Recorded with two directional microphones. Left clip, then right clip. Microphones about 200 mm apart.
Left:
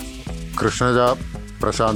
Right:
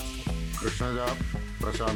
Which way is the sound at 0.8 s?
50° left (ahead or behind).